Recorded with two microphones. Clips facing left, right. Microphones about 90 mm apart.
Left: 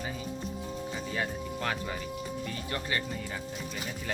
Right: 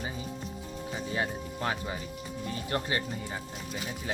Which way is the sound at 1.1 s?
20° right (ahead or behind).